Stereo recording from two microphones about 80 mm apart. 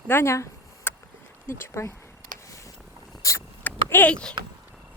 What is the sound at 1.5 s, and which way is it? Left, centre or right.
Speech, left.